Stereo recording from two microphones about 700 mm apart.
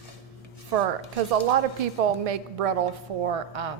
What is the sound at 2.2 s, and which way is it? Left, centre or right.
A woman's voice, right.